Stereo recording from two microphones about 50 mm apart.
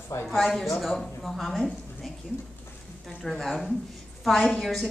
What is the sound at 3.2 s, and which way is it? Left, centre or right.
A woman's voice, centre.